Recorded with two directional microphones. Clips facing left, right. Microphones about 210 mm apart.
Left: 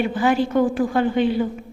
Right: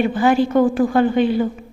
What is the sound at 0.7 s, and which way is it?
Speech, 45° right (ahead or behind).